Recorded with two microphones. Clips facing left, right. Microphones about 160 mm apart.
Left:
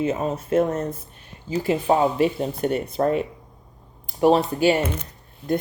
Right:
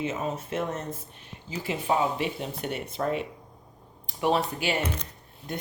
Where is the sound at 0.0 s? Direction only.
35° left (ahead or behind).